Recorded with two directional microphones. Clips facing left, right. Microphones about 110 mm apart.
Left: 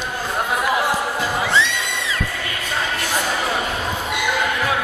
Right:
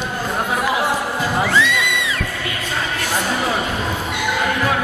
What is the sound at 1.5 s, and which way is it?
Music, 25° left (ahead or behind).